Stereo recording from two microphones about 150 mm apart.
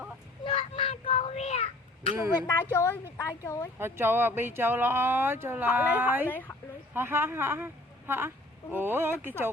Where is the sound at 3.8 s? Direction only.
15° right (ahead or behind).